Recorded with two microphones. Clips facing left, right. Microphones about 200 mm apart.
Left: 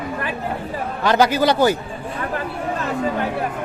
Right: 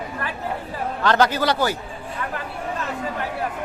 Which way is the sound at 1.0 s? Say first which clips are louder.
Left 3 dB; 10° left (ahead or behind).